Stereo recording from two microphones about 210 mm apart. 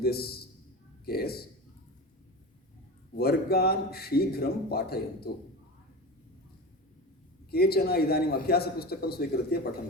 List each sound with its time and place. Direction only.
0.0 s a man's voice: 50° left (ahead or behind)
3.2 s a man's voice: 50° left (ahead or behind)
7.5 s a man's voice: 45° left (ahead or behind)